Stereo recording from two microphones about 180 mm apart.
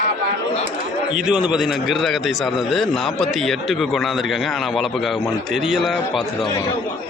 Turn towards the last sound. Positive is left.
turn(degrees=0)  # may be behind; listen again after turning